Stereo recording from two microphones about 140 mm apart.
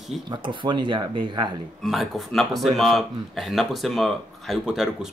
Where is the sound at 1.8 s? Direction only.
Centre (ahead or behind).